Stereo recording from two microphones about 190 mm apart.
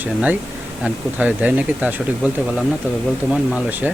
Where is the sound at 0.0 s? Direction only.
10° right (ahead or behind).